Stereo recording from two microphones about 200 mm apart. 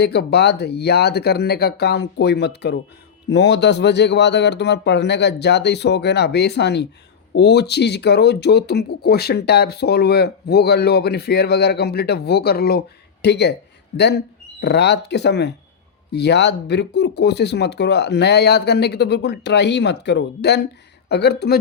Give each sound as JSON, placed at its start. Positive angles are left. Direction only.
{"t": 0.0, "sound": "speech", "side_deg": 55}